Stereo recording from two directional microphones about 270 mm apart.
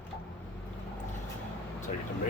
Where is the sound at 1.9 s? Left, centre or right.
Left.